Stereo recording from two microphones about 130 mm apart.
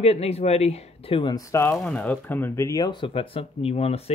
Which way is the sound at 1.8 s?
10° left (ahead or behind).